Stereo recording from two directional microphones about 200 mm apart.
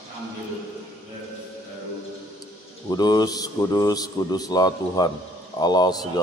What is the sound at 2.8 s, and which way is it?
A man's voice, 20° left (ahead or behind).